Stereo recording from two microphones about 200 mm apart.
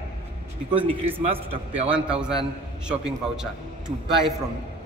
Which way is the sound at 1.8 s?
5° right (ahead or behind).